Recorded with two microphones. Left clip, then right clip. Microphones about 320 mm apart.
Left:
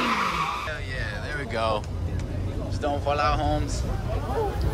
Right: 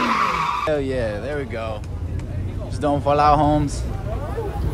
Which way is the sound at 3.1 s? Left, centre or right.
Centre.